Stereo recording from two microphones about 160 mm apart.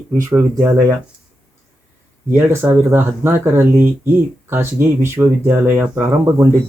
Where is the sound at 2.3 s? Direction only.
15° right (ahead or behind).